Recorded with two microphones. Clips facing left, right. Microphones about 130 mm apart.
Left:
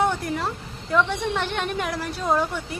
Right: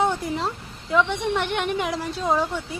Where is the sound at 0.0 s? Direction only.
20° right (ahead or behind).